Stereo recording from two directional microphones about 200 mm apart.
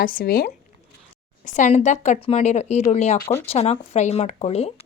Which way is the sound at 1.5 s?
40° left (ahead or behind).